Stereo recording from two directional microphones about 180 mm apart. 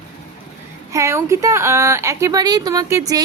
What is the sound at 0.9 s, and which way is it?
A woman's voice, 15° right (ahead or behind).